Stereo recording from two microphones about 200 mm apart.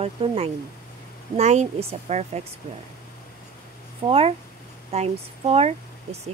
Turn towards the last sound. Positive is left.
turn(degrees=-30)  # may be behind; listen again after turning